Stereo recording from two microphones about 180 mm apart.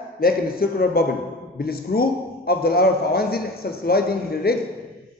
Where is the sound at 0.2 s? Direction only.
55° left (ahead or behind).